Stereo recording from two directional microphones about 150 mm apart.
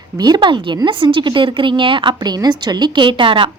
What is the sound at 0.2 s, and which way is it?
A woman's voice, 30° right (ahead or behind).